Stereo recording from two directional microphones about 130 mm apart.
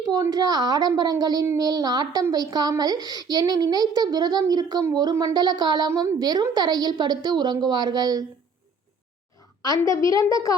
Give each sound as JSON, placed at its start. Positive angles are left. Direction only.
{"t": 0.0, "sound": "a woman's voice", "side_deg": -30}
{"t": 9.6, "sound": "a child's voice", "side_deg": 25}